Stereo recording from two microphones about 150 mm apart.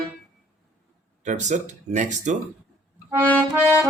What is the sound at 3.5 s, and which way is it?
Music, 10° right (ahead or behind).